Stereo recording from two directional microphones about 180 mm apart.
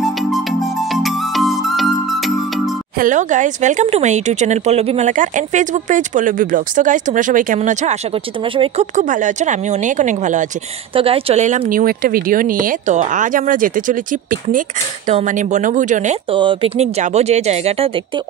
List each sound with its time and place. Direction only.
0.0 s music: centre (ahead or behind)
3.0 s speech: 45° right (ahead or behind)
11.0 s speech: 30° right (ahead or behind)
11.7 s speech: 55° right (ahead or behind)
16.3 s speech: 30° right (ahead or behind)